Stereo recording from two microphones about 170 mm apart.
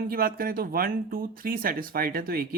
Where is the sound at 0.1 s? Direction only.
60° right (ahead or behind).